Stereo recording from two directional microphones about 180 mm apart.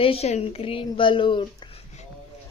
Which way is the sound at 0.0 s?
35° left (ahead or behind).